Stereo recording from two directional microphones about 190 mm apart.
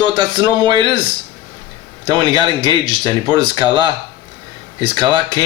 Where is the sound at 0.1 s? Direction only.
25° right (ahead or behind).